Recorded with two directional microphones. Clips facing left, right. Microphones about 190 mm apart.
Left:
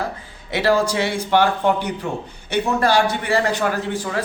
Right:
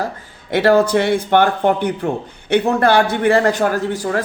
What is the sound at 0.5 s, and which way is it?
A man's voice, 55° right (ahead or behind).